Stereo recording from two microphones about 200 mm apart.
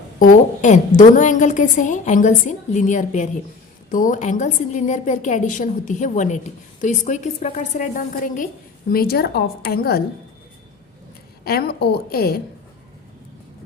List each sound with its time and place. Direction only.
0.6 s a woman's voice: 40° left (ahead or behind)
11.4 s a woman's voice: 50° left (ahead or behind)